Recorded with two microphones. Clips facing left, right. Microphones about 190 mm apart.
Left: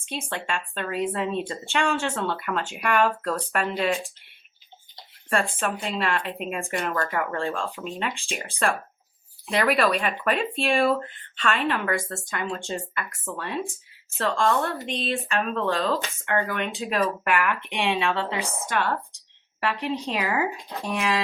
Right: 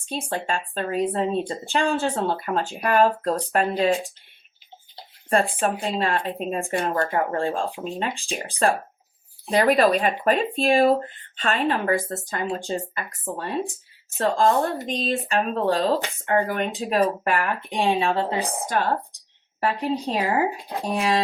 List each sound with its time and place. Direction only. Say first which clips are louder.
0.0 s speech: right 4 dB; 35° right (ahead or behind)